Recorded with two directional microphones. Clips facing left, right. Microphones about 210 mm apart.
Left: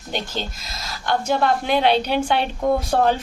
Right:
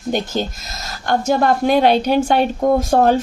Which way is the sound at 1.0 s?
45° right (ahead or behind).